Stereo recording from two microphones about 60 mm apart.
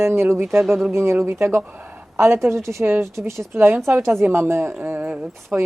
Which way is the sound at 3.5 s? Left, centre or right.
Right.